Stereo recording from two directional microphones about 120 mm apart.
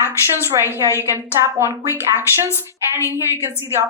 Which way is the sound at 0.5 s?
35° right (ahead or behind).